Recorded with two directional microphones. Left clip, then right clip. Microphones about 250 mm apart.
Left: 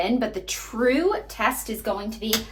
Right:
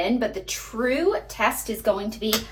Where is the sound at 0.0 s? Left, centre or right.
Centre.